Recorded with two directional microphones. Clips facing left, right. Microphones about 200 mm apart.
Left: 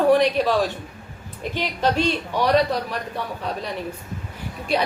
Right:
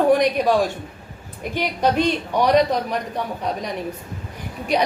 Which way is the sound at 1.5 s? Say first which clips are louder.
Right 2 dB; 15° right (ahead or behind).